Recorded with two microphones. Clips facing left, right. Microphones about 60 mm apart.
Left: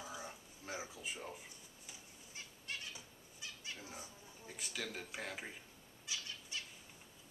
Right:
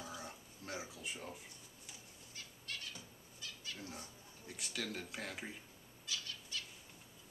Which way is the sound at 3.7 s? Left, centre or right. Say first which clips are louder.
Right 1 dB; centre.